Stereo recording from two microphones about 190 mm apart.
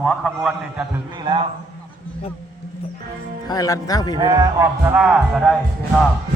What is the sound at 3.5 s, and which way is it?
Speech, 20° left (ahead or behind).